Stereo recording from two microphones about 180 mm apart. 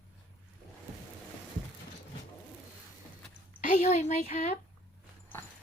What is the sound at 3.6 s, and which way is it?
Speech, 40° left (ahead or behind).